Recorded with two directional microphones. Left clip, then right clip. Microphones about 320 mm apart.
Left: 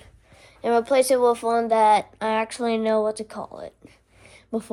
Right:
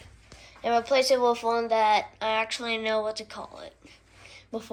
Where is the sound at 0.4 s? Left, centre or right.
Left.